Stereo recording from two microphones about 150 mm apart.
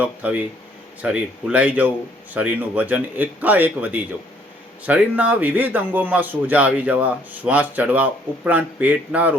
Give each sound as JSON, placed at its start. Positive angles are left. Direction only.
{"t": 0.0, "sound": "speech", "side_deg": -10}